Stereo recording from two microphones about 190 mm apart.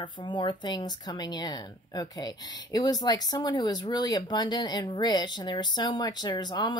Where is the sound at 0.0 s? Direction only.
25° left (ahead or behind).